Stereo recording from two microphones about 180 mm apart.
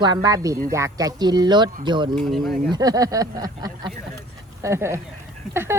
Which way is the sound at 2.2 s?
Centre (ahead or behind).